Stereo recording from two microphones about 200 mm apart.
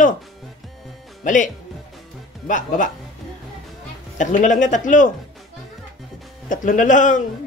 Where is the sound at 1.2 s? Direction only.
40° left (ahead or behind).